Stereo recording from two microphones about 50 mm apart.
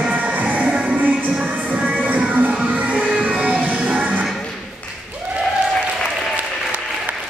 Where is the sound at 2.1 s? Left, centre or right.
Right.